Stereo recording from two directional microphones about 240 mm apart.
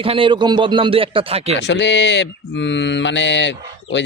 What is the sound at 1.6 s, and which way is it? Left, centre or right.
Mantra, left.